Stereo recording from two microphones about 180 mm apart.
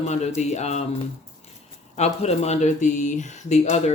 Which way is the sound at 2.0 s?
35° left (ahead or behind).